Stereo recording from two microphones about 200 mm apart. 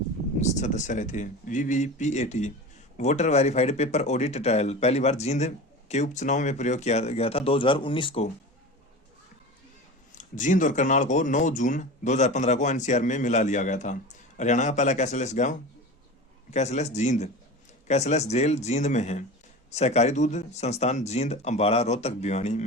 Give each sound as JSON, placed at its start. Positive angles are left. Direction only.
{"t": 0.3, "sound": "speech", "side_deg": 35}
{"t": 10.1, "sound": "speech", "side_deg": 40}